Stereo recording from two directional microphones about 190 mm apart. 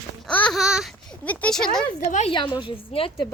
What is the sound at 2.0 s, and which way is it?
Speech, 40° left (ahead or behind).